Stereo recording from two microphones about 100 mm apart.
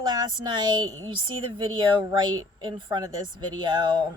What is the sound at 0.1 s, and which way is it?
A woman's voice, 45° right (ahead or behind).